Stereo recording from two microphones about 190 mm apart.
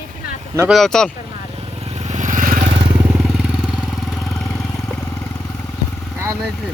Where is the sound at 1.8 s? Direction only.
35° right (ahead or behind).